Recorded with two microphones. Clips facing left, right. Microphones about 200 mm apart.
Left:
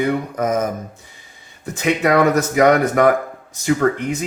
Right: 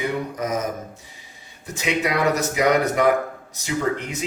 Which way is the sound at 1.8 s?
50° left (ahead or behind).